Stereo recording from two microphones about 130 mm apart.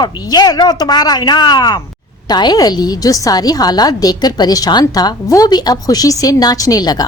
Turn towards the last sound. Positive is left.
turn(degrees=30)  # may be behind; listen again after turning